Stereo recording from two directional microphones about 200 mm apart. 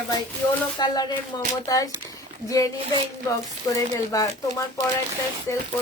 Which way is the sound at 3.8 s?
15° left (ahead or behind).